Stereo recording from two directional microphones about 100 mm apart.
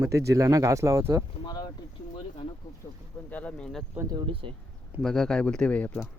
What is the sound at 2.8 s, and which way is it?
Speech, 20° left (ahead or behind).